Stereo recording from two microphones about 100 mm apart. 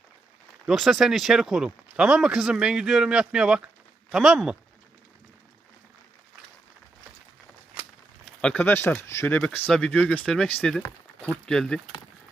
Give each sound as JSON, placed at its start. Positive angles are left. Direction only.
{"t": 0.7, "sound": "speech", "side_deg": -5}
{"t": 8.2, "sound": "a sound", "side_deg": 10}
{"t": 9.0, "sound": "speech", "side_deg": 25}
{"t": 9.4, "sound": "speech", "side_deg": 10}